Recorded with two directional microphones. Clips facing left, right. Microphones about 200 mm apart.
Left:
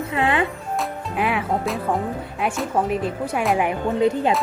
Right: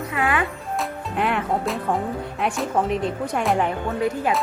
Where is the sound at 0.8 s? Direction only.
5° left (ahead or behind).